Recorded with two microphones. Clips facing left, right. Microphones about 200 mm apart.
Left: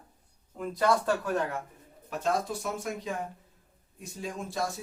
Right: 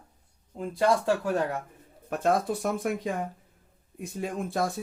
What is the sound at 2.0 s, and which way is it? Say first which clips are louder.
Speech: right 4 dB; 55° right (ahead or behind).